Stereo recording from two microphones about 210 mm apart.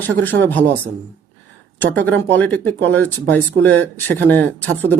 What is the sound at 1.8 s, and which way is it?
Speech, 5° left (ahead or behind).